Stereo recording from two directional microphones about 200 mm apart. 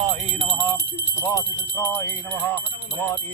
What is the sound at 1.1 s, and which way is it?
Speech, 15° left (ahead or behind).